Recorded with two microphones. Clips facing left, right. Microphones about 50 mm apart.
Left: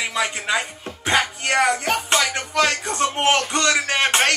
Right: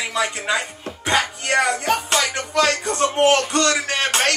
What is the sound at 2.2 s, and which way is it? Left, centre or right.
Music, centre.